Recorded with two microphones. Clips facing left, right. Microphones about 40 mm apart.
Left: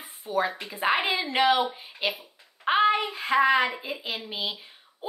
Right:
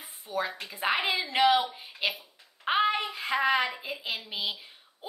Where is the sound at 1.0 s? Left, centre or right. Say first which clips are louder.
Left 2 dB; left.